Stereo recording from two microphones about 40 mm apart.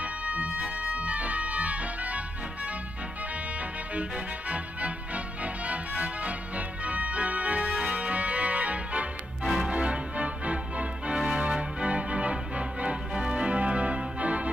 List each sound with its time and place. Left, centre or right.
0.0 s music: right
3.9 s music: right
7.7 s organ: right
9.7 s music: right
11.1 s music: centre
11.8 s music: right
13.3 s organ: right